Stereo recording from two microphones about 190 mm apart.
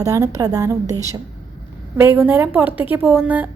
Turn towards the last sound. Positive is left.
turn(degrees=-5)  # may be behind; listen again after turning